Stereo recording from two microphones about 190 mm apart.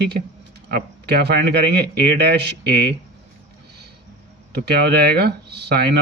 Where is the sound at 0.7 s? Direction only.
60° right (ahead or behind).